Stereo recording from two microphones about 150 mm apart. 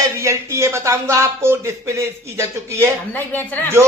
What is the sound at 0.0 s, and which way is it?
Speech, 20° right (ahead or behind).